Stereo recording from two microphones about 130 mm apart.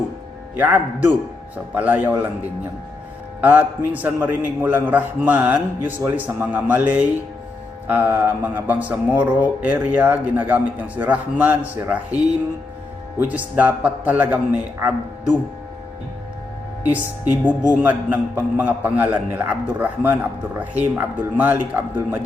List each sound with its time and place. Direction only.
0.6 s speech: 10° right (ahead or behind)
3.4 s speech: 15° right (ahead or behind)
16.9 s speech: 15° right (ahead or behind)